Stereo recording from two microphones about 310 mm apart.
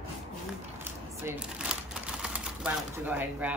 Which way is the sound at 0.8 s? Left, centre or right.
Centre.